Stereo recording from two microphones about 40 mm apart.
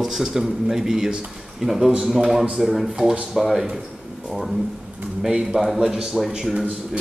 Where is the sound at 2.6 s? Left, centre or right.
Centre.